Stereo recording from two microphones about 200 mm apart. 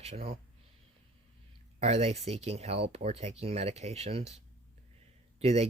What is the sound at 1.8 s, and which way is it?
Speech, 30° right (ahead or behind).